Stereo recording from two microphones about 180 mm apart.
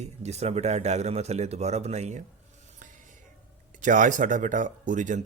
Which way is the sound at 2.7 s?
45° right (ahead or behind).